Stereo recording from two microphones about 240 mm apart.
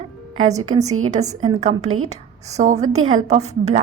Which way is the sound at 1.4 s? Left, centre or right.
Centre.